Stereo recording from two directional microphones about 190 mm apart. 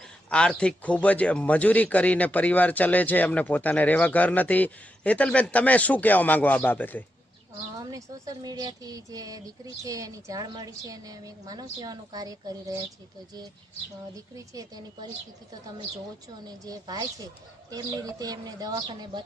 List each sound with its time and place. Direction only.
0.3 s speech: 5° left (ahead or behind)
7.8 s a woman's voice: 20° right (ahead or behind)
14.3 s a woman's voice: 20° right (ahead or behind)
16.5 s a woman's voice: 20° right (ahead or behind)